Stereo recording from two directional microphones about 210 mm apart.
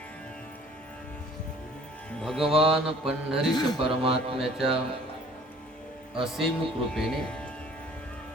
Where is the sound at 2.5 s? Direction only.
30° right (ahead or behind).